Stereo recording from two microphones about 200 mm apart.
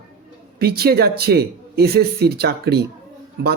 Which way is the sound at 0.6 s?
50° right (ahead or behind).